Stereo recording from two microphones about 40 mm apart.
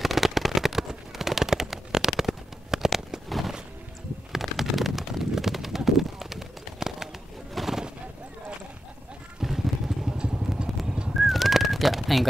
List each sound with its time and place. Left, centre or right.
0.0 s a sound: centre
3.3 s a sound: centre
5.9 s bird: centre
9.4 s vehicle: centre
10.1 s vehicle: right
10.7 s horse: centre
11.1 s bird: centre